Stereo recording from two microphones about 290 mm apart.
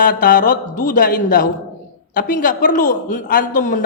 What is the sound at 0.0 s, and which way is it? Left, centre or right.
A man's voice, left.